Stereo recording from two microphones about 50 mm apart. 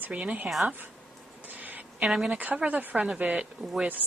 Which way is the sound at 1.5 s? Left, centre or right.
Right.